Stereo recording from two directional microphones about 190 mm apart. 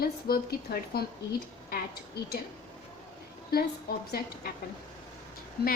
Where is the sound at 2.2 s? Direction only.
55° left (ahead or behind).